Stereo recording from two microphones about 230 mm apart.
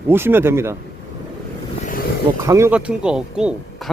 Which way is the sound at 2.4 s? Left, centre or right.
Centre.